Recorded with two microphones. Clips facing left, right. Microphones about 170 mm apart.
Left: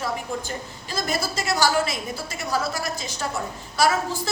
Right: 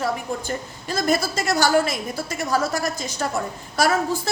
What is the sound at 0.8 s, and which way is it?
A woman's voice, 50° right (ahead or behind).